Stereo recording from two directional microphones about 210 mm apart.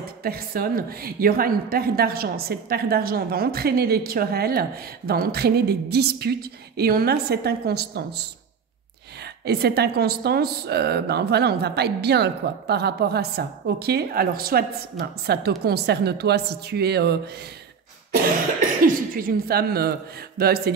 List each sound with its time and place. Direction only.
0.2 s a woman's voice: 45° right (ahead or behind)
9.4 s a woman's voice: 50° right (ahead or behind)
19.1 s a woman's voice: 45° right (ahead or behind)